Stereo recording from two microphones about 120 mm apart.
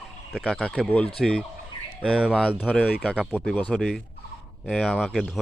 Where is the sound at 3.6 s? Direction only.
10° left (ahead or behind).